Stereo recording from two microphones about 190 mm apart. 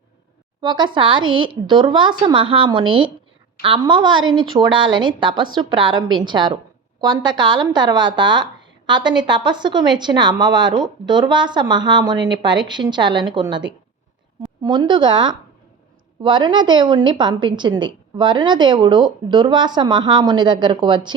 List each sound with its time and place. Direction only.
0.6 s a woman's voice: 25° right (ahead or behind)
1.2 s a woman's voice: 90° right
1.5 s a woman's voice: 25° right (ahead or behind)
14.6 s a woman's voice: 25° right (ahead or behind)